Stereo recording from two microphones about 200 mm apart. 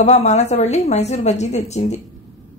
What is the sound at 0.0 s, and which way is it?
A woman's voice, 35° left (ahead or behind).